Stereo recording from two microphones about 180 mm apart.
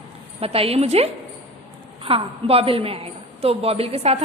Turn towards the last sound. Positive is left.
turn(degrees=-35)  # may be behind; listen again after turning